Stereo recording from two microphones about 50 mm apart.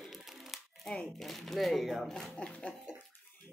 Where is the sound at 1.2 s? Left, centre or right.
Centre.